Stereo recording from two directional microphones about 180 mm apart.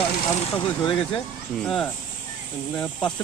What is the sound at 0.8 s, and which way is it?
Speech, 25° left (ahead or behind).